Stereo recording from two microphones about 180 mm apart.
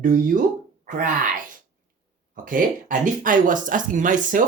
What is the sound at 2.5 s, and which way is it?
Speech, 50° right (ahead or behind).